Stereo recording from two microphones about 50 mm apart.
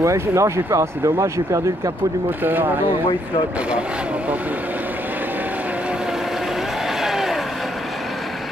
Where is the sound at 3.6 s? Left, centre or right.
Right; by 7.7 s centre.